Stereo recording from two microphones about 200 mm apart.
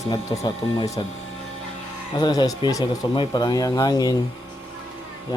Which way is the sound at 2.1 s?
20° left (ahead or behind).